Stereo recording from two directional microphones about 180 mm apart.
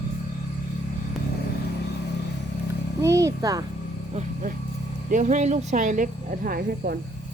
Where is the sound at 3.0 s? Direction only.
15° right (ahead or behind).